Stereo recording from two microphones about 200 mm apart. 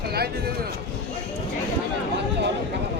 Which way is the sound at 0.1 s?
50° right (ahead or behind).